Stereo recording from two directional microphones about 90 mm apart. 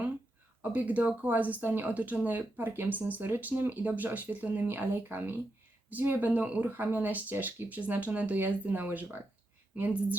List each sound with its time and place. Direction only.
0.6 s speech: 20° right (ahead or behind)